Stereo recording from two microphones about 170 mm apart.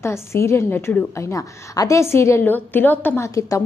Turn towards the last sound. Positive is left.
turn(degrees=20)  # may be behind; listen again after turning